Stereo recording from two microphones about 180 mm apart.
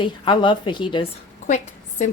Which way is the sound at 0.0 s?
25° left (ahead or behind).